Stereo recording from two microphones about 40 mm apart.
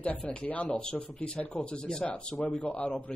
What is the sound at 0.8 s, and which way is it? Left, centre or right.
Speech, left.